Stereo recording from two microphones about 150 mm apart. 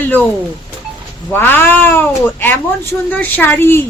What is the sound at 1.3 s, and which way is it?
A woman's voice, 15° left (ahead or behind).